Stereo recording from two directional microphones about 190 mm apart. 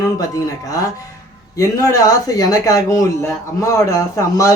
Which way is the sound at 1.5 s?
20° left (ahead or behind).